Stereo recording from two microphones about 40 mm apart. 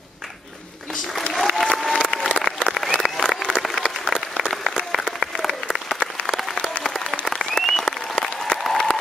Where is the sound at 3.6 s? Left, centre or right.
Centre.